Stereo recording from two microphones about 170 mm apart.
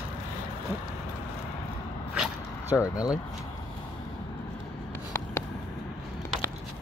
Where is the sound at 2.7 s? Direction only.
20° left (ahead or behind).